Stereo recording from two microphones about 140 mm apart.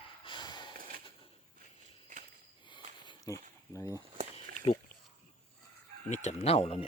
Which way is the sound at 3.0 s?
35° left (ahead or behind).